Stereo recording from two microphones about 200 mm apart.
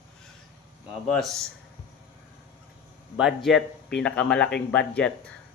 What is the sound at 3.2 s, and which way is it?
Speech, centre (ahead or behind).